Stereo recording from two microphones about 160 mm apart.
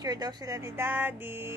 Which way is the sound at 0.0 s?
25° right (ahead or behind).